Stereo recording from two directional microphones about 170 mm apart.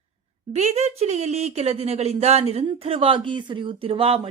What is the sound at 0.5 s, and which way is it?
A woman's voice, 40° right (ahead or behind).